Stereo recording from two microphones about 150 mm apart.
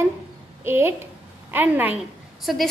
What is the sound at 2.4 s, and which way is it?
Speech, centre (ahead or behind).